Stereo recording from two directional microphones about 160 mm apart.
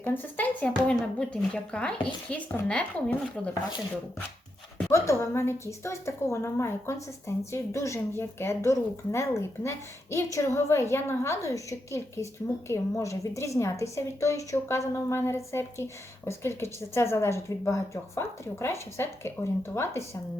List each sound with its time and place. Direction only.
0.0 s a woman's voice: 10° left (ahead or behind)
4.9 s a woman's voice: 20° left (ahead or behind)